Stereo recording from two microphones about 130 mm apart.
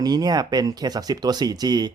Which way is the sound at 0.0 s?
30° right (ahead or behind).